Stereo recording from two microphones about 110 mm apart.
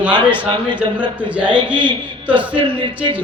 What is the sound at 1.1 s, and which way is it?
Speech, 10° right (ahead or behind).